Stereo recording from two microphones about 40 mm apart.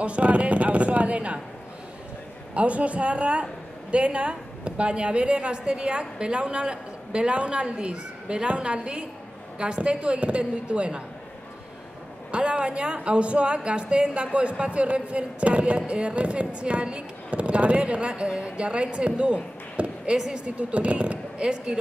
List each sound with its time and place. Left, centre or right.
0.0 s speech: right
2.5 s a woman's voice: right
12.3 s a woman's voice: right
20.2 s speech: centre
20.4 s speech: right